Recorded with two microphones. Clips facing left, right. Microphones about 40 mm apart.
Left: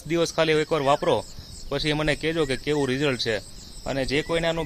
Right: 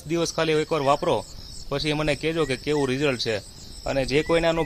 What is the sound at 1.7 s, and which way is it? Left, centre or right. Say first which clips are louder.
Speech: even; centre.